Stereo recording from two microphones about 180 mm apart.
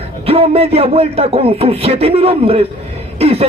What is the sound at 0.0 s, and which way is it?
A man's voice, 30° right (ahead or behind).